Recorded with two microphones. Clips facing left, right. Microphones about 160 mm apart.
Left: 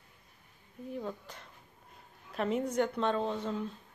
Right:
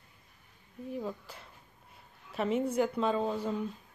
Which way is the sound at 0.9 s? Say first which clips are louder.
Right 1 dB; 5° right (ahead or behind).